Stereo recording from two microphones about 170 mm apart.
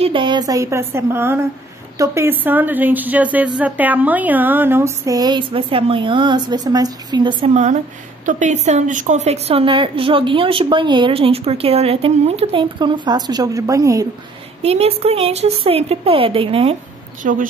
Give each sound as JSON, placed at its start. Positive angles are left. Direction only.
{"t": 0.0, "sound": "a woman's voice", "side_deg": -30}
{"t": 7.4, "sound": "a woman's voice", "side_deg": -40}
{"t": 14.6, "sound": "a woman's voice", "side_deg": -35}
{"t": 17.2, "sound": "a woman's voice", "side_deg": -50}